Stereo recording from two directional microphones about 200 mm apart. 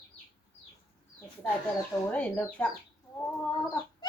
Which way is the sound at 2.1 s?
5° left (ahead or behind).